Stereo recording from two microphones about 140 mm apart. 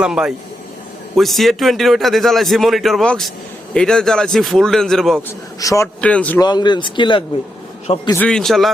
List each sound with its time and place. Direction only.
0.0 s a man's voice: 5° right (ahead or behind)
5.5 s a man's voice: 25° left (ahead or behind)
6.0 s a man's voice: 10° left (ahead or behind)
6.4 s speech: 30° left (ahead or behind)
8.1 s a man's voice: 10° left (ahead or behind)